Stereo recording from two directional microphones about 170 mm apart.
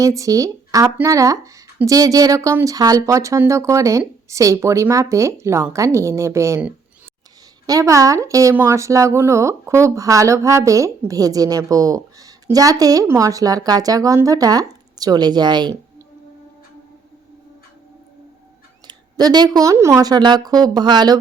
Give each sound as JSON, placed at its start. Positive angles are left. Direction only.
{"t": 0.0, "sound": "speech", "side_deg": -20}
{"t": 7.7, "sound": "speech", "side_deg": -20}
{"t": 18.9, "sound": "speech", "side_deg": -25}